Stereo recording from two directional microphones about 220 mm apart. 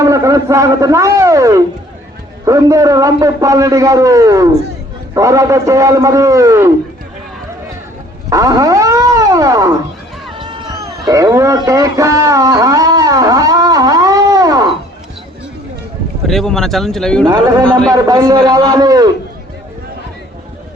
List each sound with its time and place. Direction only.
0.0 s a man's voice: 15° right (ahead or behind)
8.3 s dog: 15° right (ahead or behind)
10.3 s cat: 20° right (ahead or behind)
16.2 s speech: centre (ahead or behind)
17.2 s a man's voice: 15° right (ahead or behind)
17.6 s speech: 5° left (ahead or behind)
17.9 s a man's voice: 15° right (ahead or behind)